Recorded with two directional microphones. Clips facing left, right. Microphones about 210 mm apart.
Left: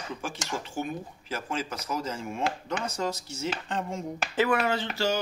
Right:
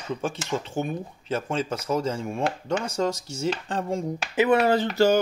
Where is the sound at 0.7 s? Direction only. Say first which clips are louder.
Right 4 dB; 25° right (ahead or behind).